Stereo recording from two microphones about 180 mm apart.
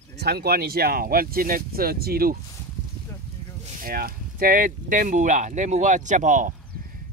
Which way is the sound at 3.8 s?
55° right (ahead or behind).